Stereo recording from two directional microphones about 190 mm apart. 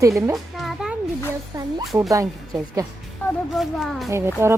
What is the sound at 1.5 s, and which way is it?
A woman's voice, 20° right (ahead or behind).